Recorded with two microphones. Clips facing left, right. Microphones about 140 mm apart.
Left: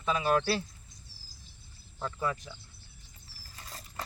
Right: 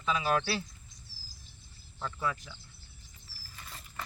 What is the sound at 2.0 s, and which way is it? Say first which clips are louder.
Speech: left 2 dB; 20° left (ahead or behind).